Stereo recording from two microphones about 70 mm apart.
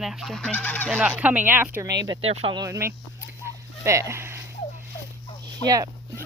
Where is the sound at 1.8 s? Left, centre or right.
Right.